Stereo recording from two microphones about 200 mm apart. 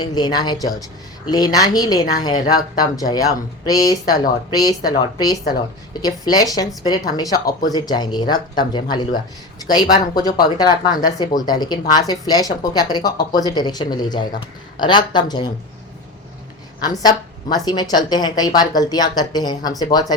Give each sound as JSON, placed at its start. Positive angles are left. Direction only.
{"t": 0.0, "sound": "speech", "side_deg": 20}
{"t": 16.8, "sound": "speech", "side_deg": 20}